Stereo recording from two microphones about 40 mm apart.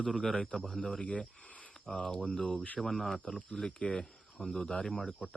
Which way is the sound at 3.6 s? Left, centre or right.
Left.